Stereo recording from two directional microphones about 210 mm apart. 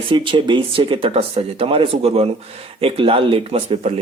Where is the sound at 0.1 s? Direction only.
25° right (ahead or behind).